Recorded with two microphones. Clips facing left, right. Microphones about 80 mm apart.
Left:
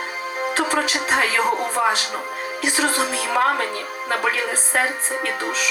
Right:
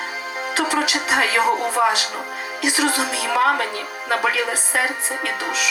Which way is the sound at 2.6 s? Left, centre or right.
Left.